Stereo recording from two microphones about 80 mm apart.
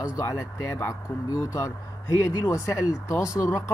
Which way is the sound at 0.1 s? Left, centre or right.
Left.